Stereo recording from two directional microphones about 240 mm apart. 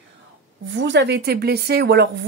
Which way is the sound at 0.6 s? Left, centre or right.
Right.